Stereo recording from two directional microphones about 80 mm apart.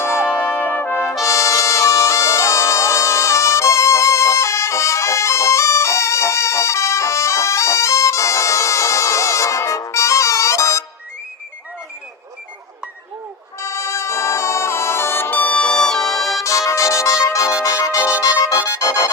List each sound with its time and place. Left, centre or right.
0.2 s brass instrument: centre
0.5 s brass instrument: left
1.3 s music: left
13.6 s music: left; by 16.1 s centre
16.4 s music: left